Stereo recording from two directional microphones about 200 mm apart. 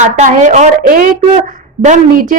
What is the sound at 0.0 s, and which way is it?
A woman's voice, 40° right (ahead or behind).